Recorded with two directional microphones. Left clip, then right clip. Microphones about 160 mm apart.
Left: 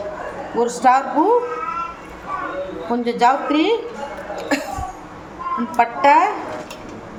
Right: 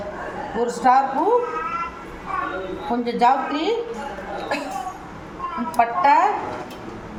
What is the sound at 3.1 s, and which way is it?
Speech, 55° left (ahead or behind).